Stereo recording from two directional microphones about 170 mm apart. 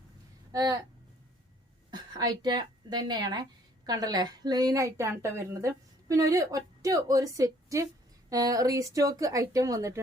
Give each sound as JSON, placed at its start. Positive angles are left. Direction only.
{"t": 0.5, "sound": "a woman's voice", "side_deg": -20}
{"t": 1.9, "sound": "a woman's voice", "side_deg": -25}